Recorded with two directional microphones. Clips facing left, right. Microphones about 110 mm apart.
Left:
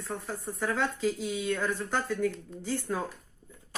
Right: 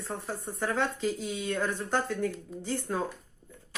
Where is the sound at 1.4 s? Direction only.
30° right (ahead or behind).